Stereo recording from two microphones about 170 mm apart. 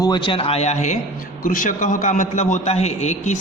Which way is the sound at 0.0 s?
25° left (ahead or behind).